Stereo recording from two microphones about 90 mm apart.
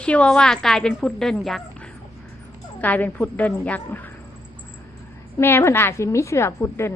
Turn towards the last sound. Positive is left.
turn(degrees=35)  # may be behind; listen again after turning